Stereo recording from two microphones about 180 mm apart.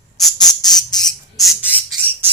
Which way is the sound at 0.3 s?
20° left (ahead or behind).